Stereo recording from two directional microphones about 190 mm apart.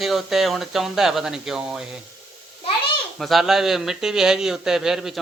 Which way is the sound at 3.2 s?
Centre (ahead or behind).